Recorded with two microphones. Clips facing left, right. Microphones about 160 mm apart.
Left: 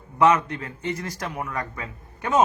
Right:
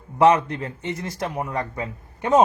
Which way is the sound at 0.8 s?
20° right (ahead or behind).